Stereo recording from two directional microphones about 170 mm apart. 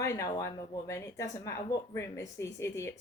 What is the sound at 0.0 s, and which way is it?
Speech, 15° left (ahead or behind).